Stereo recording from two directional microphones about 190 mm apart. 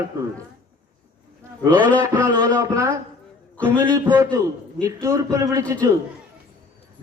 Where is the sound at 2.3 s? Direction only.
20° right (ahead or behind).